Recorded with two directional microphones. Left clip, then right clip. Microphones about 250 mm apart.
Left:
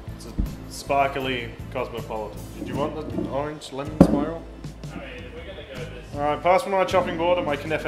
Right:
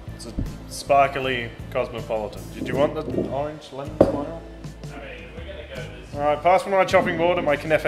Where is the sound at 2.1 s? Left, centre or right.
Right.